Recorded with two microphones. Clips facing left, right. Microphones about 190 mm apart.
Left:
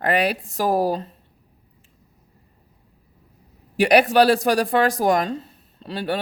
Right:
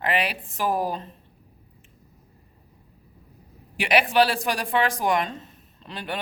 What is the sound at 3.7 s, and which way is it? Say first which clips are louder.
Speech: left 5 dB; 40° left (ahead or behind).